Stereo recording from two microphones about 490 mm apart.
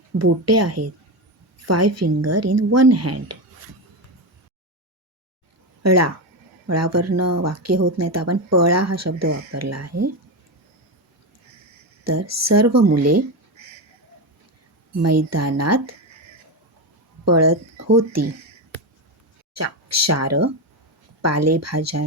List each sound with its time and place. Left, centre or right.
0.2 s speech: right
5.8 s speech: right
12.0 s speech: right
15.0 s speech: right
17.2 s speech: right
19.5 s speech: right